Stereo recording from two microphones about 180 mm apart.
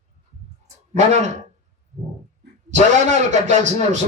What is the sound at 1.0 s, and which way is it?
Speech, 40° right (ahead or behind).